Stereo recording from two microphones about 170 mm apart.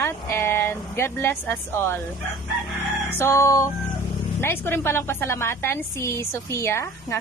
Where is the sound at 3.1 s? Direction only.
15° left (ahead or behind).